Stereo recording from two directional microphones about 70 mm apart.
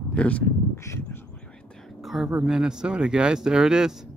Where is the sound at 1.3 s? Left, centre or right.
Centre.